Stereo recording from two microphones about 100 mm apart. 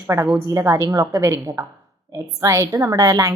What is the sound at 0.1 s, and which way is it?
Speech, 30° right (ahead or behind).